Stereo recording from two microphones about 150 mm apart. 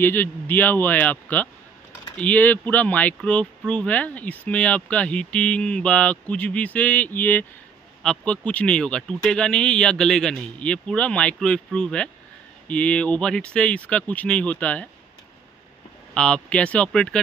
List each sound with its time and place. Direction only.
0.0 s speech: 15° left (ahead or behind)
16.2 s speech: 5° left (ahead or behind)